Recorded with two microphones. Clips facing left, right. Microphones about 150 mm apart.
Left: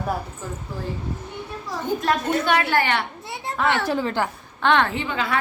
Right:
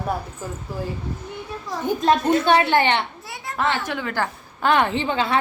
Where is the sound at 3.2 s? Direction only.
25° left (ahead or behind).